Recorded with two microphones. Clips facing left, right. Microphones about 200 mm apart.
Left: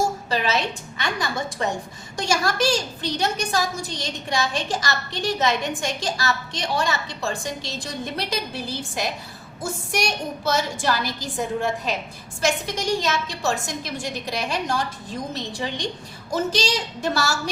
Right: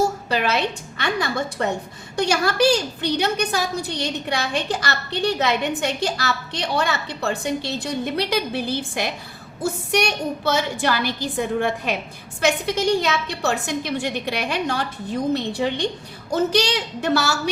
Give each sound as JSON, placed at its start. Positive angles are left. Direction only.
{"t": 0.3, "sound": "a woman's voice", "side_deg": -60}